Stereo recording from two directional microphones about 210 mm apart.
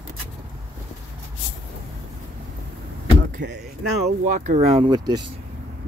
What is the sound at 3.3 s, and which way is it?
Speech, 55° right (ahead or behind).